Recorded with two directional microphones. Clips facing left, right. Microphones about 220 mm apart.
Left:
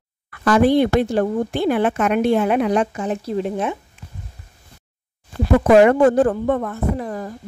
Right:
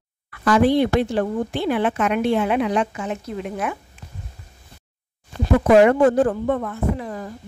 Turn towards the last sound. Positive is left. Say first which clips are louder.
# left 2 dB
turn(degrees=45)  # may be behind; listen again after turning